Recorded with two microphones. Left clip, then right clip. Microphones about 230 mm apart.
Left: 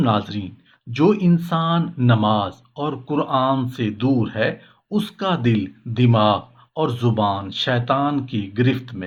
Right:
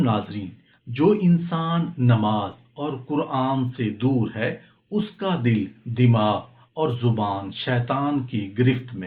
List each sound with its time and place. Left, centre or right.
0.0 s speech: left